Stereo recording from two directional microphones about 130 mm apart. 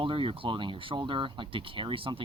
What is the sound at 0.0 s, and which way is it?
Speech, 40° right (ahead or behind).